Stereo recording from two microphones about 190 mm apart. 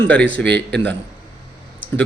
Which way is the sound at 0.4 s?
65° right (ahead or behind).